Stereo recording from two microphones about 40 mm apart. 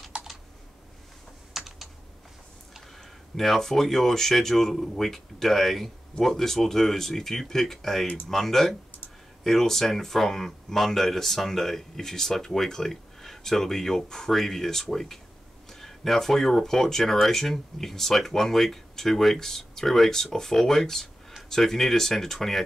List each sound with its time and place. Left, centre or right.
0.1 s computer keyboard: right
1.5 s typing: centre
3.0 s speech: centre